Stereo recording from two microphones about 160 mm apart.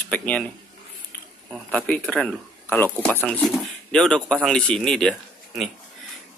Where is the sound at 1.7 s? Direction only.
5° left (ahead or behind).